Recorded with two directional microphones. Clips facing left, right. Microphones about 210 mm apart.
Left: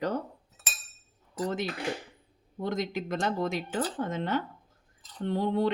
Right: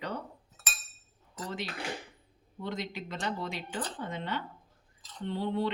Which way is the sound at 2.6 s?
45° left (ahead or behind).